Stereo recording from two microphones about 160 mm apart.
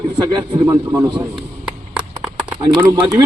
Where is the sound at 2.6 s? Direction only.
25° right (ahead or behind).